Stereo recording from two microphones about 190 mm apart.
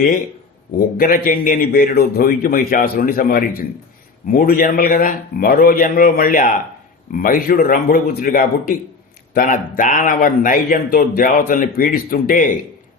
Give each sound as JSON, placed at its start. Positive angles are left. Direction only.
{"t": 0.8, "sound": "a man's voice", "side_deg": 50}